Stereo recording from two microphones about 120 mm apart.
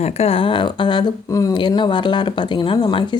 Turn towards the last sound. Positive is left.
turn(degrees=40)  # may be behind; listen again after turning